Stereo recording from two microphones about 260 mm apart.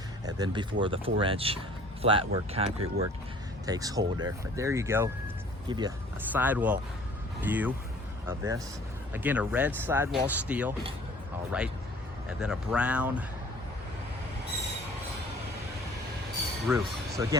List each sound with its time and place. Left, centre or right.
0.3 s speech: centre
6.3 s speech: centre
12.4 s speech: centre
16.7 s speech: centre